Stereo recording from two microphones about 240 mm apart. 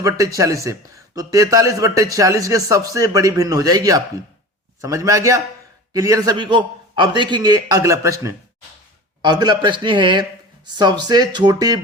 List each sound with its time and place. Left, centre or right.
0.3 s a man's voice: centre